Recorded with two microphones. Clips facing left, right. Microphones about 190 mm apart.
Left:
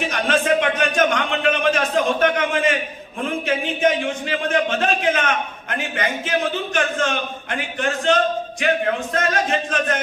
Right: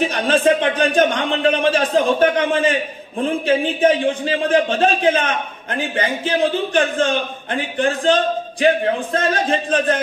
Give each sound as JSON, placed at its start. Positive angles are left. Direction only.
{"t": 0.0, "sound": "a man's voice", "side_deg": -30}